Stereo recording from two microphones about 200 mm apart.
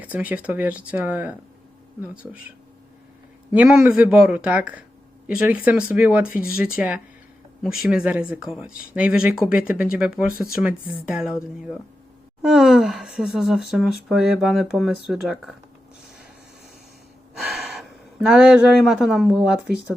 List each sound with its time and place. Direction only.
0.0 s speech: 10° right (ahead or behind)
3.5 s speech: 5° right (ahead or behind)
6.4 s speech: 45° left (ahead or behind)
6.7 s speech: 5° right (ahead or behind)
10.6 s speech: 5° right (ahead or behind)
12.4 s speech: centre (ahead or behind)
17.3 s speech: centre (ahead or behind)